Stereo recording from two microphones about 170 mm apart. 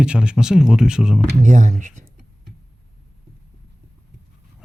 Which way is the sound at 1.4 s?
45° right (ahead or behind).